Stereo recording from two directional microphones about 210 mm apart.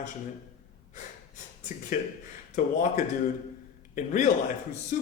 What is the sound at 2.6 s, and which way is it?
Speech, 40° left (ahead or behind).